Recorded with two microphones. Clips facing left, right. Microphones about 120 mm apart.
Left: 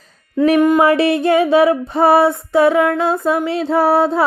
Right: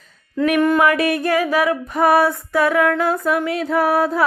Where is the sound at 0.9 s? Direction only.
25° left (ahead or behind).